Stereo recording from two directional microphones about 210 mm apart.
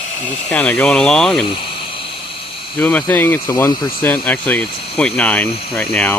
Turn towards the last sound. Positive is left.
turn(degrees=5)  # may be behind; listen again after turning